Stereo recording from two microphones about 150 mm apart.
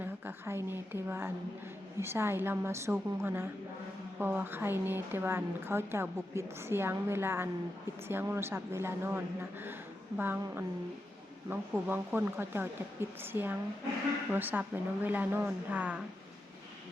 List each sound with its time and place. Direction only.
0.0 s a woman's voice: 15° right (ahead or behind)